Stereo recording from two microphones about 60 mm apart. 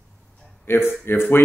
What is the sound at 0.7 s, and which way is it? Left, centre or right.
Speech, left.